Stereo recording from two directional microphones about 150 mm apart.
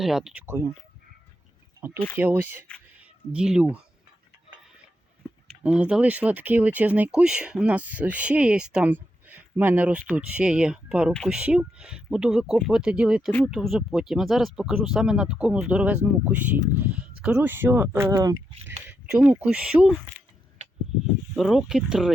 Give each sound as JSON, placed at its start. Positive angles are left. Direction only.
{"t": 0.0, "sound": "speech", "side_deg": 0}
{"t": 0.4, "sound": "speech", "side_deg": -15}
{"t": 2.1, "sound": "speech", "side_deg": -15}
{"t": 5.6, "sound": "speech", "side_deg": -10}
{"t": 11.3, "sound": "speech", "side_deg": -5}
{"t": 18.9, "sound": "speech", "side_deg": -5}
{"t": 21.3, "sound": "speech", "side_deg": 0}